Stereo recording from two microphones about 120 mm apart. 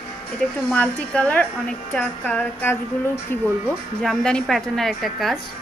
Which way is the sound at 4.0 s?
5° left (ahead or behind).